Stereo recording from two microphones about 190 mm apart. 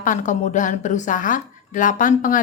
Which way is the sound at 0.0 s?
40° left (ahead or behind).